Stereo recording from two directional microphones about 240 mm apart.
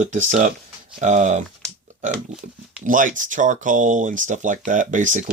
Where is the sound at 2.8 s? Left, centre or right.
Right.